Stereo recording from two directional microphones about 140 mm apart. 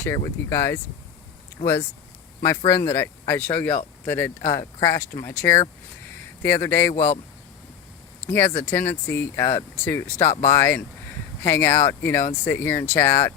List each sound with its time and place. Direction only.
0.5 s speech: 20° left (ahead or behind)
8.3 s speech: 15° left (ahead or behind)